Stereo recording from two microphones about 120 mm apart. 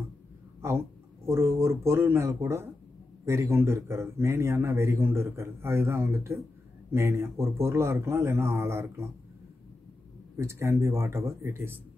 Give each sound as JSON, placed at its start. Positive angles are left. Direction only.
{"t": 0.6, "sound": "speech", "side_deg": -20}
{"t": 10.3, "sound": "speech", "side_deg": -25}